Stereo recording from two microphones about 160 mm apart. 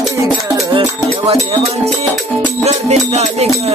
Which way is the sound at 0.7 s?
35° right (ahead or behind).